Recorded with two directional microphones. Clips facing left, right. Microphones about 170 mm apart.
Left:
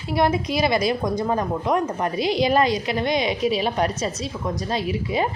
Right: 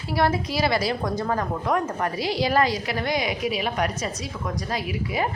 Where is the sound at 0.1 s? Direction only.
20° left (ahead or behind).